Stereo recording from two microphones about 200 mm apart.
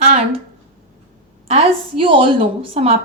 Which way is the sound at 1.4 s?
30° right (ahead or behind).